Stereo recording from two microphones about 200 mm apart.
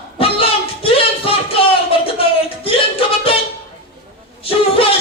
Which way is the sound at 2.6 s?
25° left (ahead or behind).